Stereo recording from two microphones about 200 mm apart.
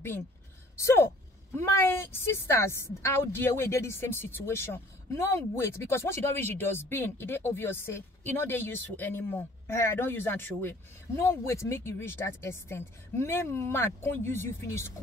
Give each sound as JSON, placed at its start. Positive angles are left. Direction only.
{"t": 0.7, "sound": "speech", "side_deg": 15}